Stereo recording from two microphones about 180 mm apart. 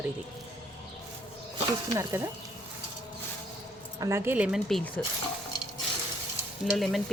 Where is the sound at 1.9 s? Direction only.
15° right (ahead or behind).